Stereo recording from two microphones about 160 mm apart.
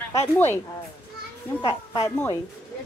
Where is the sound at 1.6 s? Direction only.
30° left (ahead or behind).